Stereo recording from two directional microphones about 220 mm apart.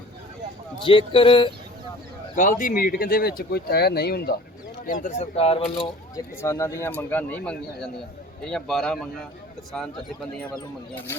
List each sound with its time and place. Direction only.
0.9 s speech: 25° left (ahead or behind)
2.3 s speech: 35° left (ahead or behind)
4.9 s speech: 35° left (ahead or behind)
6.4 s a man's voice: 10° left (ahead or behind)